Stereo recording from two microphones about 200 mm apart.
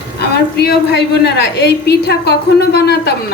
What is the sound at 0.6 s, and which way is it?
A woman's voice, 55° left (ahead or behind).